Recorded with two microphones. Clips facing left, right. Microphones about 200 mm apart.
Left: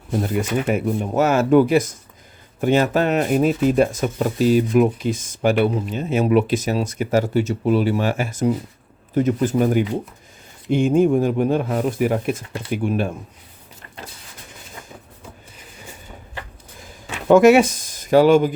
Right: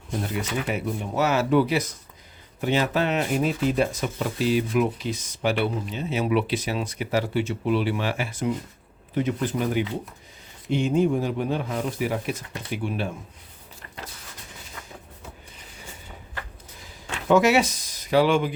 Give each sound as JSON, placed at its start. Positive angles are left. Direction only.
{"t": 0.3, "sound": "speech", "side_deg": 50}
{"t": 17.2, "sound": "speech", "side_deg": 50}